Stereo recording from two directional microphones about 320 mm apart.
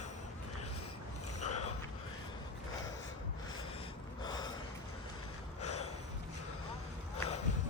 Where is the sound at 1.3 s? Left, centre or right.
Left.